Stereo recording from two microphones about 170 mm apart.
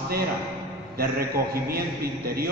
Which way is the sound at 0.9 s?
60° right (ahead or behind).